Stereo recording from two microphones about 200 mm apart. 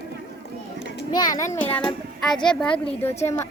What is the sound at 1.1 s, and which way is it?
Speech, 20° left (ahead or behind).